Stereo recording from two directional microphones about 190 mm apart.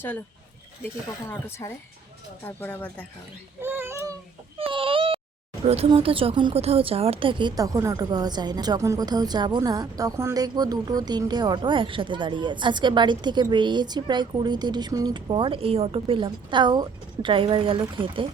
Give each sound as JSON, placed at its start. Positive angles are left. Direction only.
{"t": 1.3, "sound": "speech", "side_deg": 15}
{"t": 3.6, "sound": "a sound", "side_deg": -10}
{"t": 4.5, "sound": "baby cry", "side_deg": -30}
{"t": 5.6, "sound": "speech", "side_deg": -30}